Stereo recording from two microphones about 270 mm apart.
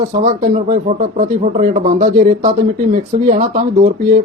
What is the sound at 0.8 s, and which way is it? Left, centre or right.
Speech, right.